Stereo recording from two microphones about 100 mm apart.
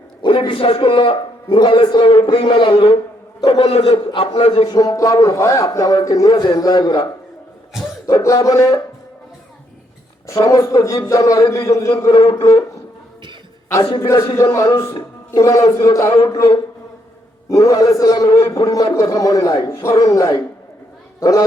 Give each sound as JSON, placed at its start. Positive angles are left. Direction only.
{"t": 0.2, "sound": "a man's voice", "side_deg": 55}
{"t": 4.1, "sound": "a man's voice", "side_deg": 70}
{"t": 4.7, "sound": "a man's voice", "side_deg": 40}
{"t": 10.5, "sound": "a man's voice", "side_deg": 35}
{"t": 12.1, "sound": "a man's voice", "side_deg": 60}
{"t": 13.8, "sound": "a man's voice", "side_deg": 60}
{"t": 14.3, "sound": "a man's voice", "side_deg": 30}
{"t": 17.5, "sound": "a man's voice", "side_deg": 35}